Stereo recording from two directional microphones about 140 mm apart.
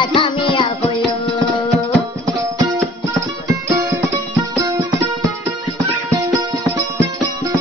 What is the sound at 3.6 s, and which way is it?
Music, 20° right (ahead or behind).